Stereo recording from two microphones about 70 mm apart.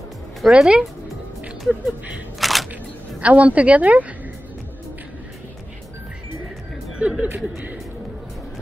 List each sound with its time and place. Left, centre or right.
0.4 s speech: centre
2.3 s single-lens reflex camera: centre
3.2 s a woman's voice: centre
7.0 s a sound: centre